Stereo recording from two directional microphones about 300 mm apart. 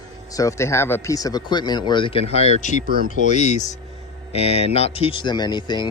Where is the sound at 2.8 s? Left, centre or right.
Right.